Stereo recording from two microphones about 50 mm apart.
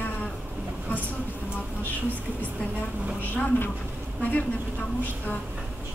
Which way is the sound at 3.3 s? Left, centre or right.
Left.